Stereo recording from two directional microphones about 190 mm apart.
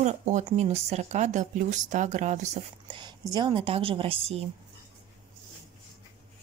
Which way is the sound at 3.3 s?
25° right (ahead or behind).